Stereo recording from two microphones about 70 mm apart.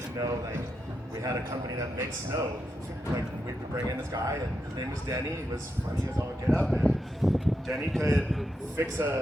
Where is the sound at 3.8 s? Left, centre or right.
Right.